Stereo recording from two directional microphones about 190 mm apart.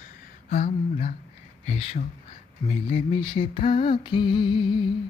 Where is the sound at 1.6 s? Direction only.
35° left (ahead or behind).